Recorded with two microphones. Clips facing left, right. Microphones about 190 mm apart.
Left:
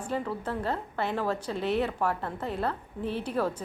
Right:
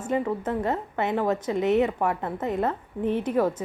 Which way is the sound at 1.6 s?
75° right (ahead or behind).